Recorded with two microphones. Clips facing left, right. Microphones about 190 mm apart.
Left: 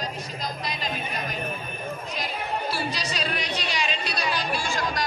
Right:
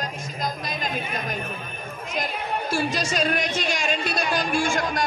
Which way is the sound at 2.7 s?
45° right (ahead or behind).